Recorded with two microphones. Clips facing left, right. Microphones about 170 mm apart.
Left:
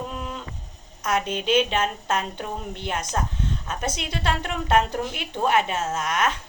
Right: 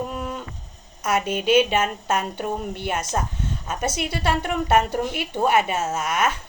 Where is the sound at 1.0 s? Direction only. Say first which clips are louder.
Right 3 dB; 5° right (ahead or behind).